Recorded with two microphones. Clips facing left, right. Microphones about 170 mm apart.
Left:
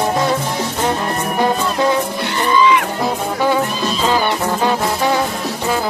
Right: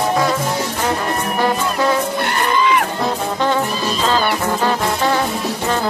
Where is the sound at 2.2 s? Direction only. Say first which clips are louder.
Left 2 dB; 55° right (ahead or behind).